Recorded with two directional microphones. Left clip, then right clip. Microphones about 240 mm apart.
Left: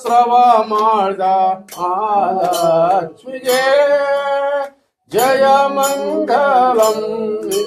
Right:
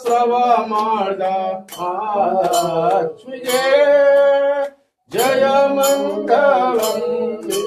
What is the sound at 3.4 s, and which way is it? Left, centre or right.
Music, left.